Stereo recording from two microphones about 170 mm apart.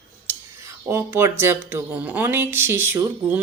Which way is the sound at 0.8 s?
15° right (ahead or behind).